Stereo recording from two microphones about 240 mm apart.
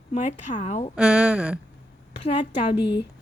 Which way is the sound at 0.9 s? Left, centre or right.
Centre.